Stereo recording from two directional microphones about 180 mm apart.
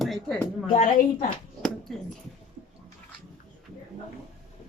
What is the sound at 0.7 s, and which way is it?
Speech, 40° left (ahead or behind).